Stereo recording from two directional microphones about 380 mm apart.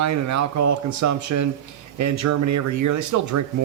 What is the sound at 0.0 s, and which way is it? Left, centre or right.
A man's voice, right.